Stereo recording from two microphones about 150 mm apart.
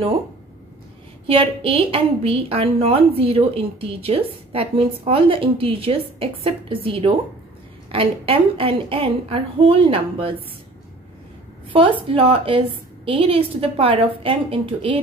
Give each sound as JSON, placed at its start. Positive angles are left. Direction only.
{"t": 1.2, "sound": "a woman's voice", "side_deg": -35}
{"t": 11.7, "sound": "a woman's voice", "side_deg": -35}